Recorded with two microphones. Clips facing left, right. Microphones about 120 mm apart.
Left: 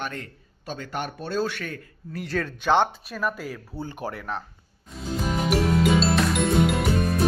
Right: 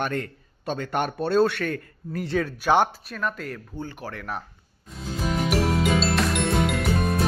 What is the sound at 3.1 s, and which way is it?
Speech, 5° left (ahead or behind).